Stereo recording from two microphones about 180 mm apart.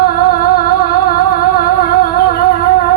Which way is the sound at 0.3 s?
55° left (ahead or behind).